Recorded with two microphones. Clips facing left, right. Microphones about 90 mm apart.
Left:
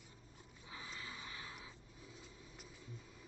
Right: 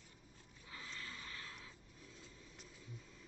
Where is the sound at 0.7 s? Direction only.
15° left (ahead or behind).